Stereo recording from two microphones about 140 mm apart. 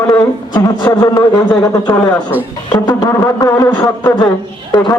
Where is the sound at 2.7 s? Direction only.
25° left (ahead or behind).